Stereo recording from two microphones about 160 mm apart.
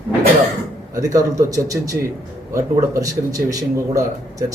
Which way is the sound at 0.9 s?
20° right (ahead or behind).